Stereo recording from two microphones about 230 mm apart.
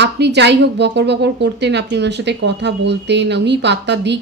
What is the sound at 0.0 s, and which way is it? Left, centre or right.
Speech, right.